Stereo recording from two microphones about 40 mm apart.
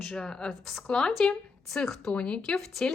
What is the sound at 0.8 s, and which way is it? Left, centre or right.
Speech, left.